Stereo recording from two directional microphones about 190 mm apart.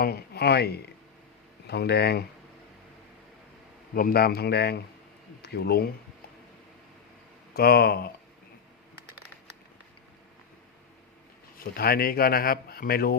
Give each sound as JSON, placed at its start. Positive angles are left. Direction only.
{"t": 0.0, "sound": "a man's voice", "side_deg": 55}
{"t": 3.9, "sound": "a man's voice", "side_deg": 50}
{"t": 7.5, "sound": "a man's voice", "side_deg": 55}
{"t": 11.6, "sound": "speech", "side_deg": 50}